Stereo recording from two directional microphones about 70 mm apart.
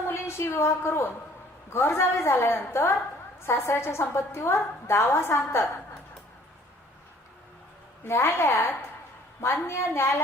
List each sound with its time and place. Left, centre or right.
0.1 s a woman's voice: left
8.0 s a woman's voice: left